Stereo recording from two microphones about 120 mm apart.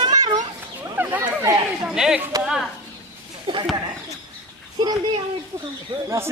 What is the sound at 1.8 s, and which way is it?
Speech, 5° right (ahead or behind).